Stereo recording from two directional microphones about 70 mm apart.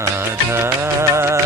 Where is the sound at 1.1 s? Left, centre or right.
Right.